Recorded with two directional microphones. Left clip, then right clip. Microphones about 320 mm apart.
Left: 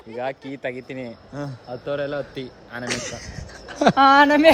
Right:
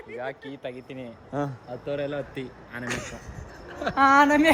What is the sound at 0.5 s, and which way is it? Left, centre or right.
Speech, left.